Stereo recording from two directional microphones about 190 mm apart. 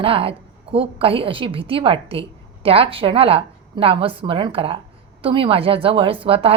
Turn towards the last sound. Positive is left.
turn(degrees=-30)  # may be behind; listen again after turning